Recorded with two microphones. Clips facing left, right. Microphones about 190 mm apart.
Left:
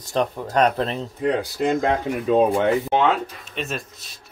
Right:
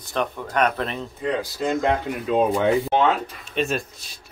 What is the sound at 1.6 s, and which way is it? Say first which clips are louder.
Speech: left 1 dB; 50° left (ahead or behind).